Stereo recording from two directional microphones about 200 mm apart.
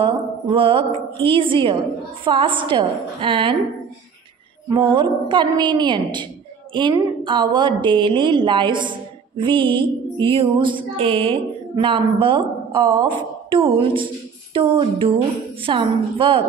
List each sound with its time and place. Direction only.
0.6 s speech: 25° right (ahead or behind)
4.6 s speech: 25° right (ahead or behind)